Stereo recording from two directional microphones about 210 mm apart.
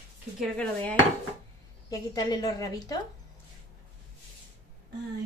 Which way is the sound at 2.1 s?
20° left (ahead or behind).